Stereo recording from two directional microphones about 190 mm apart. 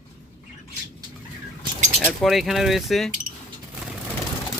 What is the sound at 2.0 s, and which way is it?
Speech, centre (ahead or behind).